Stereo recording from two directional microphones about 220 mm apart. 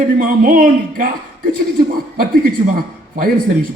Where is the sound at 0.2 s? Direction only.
40° right (ahead or behind).